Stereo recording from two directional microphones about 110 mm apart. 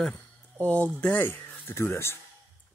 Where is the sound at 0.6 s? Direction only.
15° left (ahead or behind).